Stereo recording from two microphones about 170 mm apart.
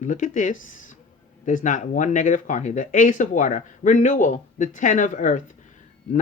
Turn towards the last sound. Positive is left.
turn(degrees=50)  # may be behind; listen again after turning